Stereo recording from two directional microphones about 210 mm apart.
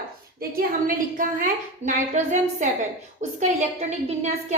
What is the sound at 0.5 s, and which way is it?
A woman's voice, 40° right (ahead or behind).